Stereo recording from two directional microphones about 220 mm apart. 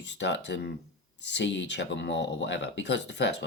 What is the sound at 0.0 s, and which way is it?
Speech, 50° left (ahead or behind).